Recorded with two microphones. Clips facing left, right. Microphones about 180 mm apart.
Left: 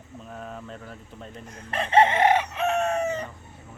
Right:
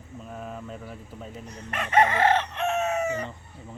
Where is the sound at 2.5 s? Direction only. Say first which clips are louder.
Left 2 dB; centre (ahead or behind).